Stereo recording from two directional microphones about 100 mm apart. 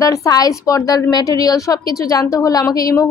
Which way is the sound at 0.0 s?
35° left (ahead or behind).